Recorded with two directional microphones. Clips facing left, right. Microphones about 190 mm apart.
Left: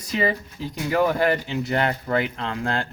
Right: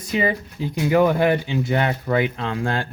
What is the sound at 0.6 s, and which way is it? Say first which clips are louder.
Speech: right 4 dB; 55° right (ahead or behind).